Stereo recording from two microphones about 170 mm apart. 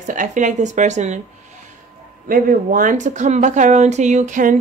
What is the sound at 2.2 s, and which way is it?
A woman's voice, 55° right (ahead or behind).